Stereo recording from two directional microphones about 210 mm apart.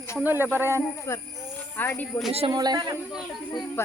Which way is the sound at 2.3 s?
25° right (ahead or behind).